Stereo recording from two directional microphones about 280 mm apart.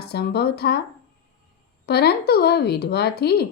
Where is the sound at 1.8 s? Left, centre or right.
Left.